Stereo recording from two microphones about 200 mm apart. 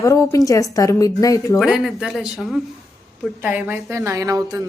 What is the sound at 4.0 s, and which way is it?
Speech, 15° right (ahead or behind).